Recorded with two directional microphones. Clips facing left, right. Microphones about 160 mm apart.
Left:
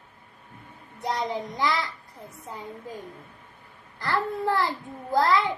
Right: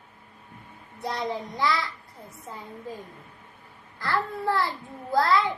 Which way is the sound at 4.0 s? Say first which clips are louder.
Left 1 dB; 20° left (ahead or behind).